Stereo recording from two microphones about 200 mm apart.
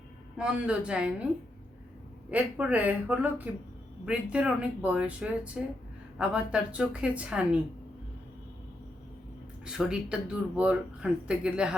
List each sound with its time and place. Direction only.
0.3 s speech: 5° right (ahead or behind)
2.3 s speech: 5° right (ahead or behind)
9.6 s speech: 5° right (ahead or behind)